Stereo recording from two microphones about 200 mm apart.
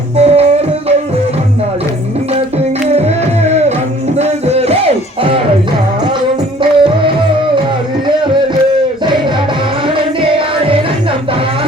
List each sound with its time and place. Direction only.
0.2 s music: 30° right (ahead or behind)
3.4 s music: 35° right (ahead or behind)
6.6 s music: 25° right (ahead or behind)